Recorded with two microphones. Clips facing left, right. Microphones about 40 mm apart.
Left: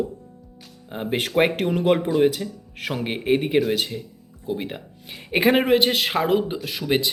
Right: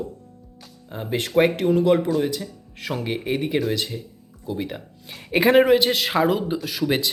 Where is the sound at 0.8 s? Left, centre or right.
Left.